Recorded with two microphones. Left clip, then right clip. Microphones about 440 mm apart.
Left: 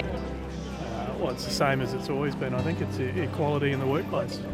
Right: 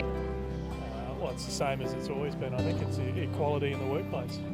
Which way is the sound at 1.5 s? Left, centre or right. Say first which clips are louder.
Left 6 dB; centre.